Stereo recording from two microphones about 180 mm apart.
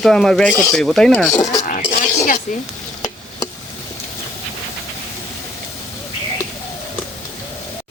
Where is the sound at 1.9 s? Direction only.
45° left (ahead or behind).